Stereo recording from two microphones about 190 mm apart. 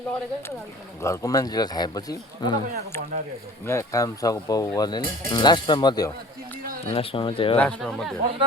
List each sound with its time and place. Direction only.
1.0 s speech: 15° left (ahead or behind)
7.6 s speech: 5° left (ahead or behind)